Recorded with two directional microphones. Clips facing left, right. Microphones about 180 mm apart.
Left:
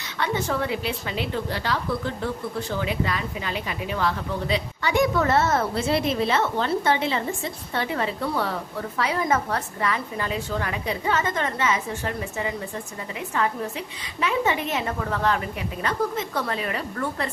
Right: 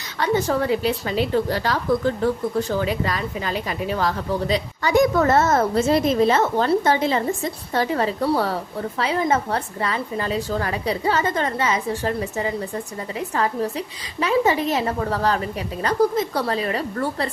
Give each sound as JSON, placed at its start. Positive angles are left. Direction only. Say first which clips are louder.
{"t": 0.2, "sound": "a woman's voice", "louder": "right 5 dB", "side_deg": -40}
{"t": 9.0, "sound": "a woman's voice", "louder": "right 3 dB", "side_deg": -25}